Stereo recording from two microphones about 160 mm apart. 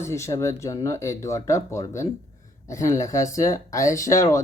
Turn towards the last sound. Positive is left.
turn(degrees=20)  # may be behind; listen again after turning